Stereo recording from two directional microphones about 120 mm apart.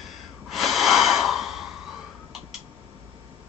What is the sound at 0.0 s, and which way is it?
Snort, centre (ahead or behind).